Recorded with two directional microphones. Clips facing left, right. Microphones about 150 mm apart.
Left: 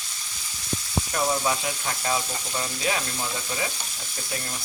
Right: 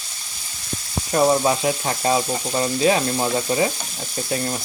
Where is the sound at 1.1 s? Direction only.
35° right (ahead or behind).